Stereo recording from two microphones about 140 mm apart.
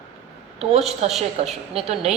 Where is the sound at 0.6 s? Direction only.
45° right (ahead or behind).